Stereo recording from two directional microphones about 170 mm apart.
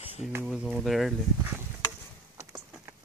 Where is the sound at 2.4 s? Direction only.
15° right (ahead or behind).